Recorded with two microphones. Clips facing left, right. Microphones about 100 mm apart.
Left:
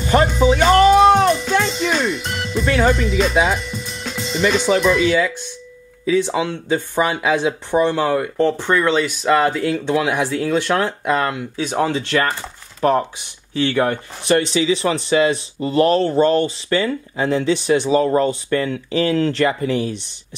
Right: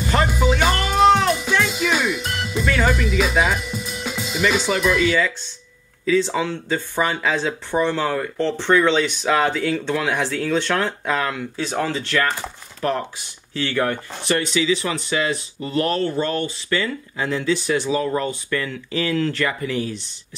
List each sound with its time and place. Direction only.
0.3 s speech: 5° right (ahead or behind)
1.2 s music: 5° right (ahead or behind)
6.0 s speech: 15° left (ahead or behind)
11.8 s speech: 20° left (ahead or behind)
13.5 s speech: 15° left (ahead or behind)
18.0 s speech: 30° left (ahead or behind)